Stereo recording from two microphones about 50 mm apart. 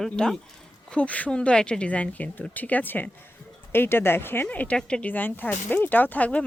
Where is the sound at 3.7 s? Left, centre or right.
Left.